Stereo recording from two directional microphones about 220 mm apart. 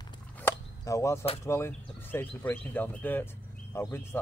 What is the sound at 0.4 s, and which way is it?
Chop, 10° left (ahead or behind).